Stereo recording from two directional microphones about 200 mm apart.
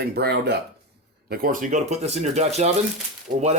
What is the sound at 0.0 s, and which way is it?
Speech, 55° right (ahead or behind).